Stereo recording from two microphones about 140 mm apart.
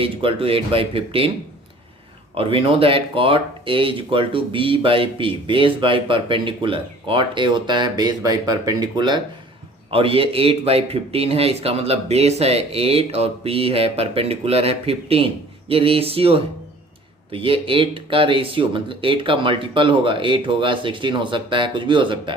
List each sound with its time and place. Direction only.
0.0 s speech: 40° right (ahead or behind)
2.3 s speech: 40° right (ahead or behind)